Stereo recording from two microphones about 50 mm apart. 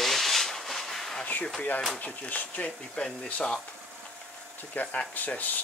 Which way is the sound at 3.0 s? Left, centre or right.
Left.